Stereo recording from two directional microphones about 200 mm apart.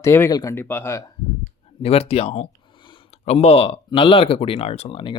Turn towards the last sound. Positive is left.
turn(degrees=25)  # may be behind; listen again after turning